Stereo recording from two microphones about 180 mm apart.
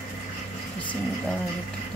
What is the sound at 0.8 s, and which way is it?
Speech, 10° left (ahead or behind).